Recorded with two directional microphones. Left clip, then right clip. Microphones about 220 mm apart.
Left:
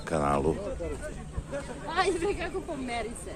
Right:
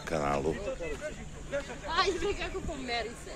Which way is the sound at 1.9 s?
50° left (ahead or behind).